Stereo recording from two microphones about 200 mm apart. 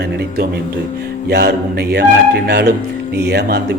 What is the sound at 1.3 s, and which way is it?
A man's voice, 55° right (ahead or behind).